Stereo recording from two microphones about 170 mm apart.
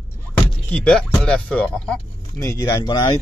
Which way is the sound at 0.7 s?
5° left (ahead or behind).